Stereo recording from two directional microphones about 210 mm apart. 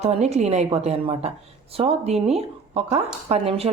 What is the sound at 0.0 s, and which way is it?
Speech, 30° right (ahead or behind).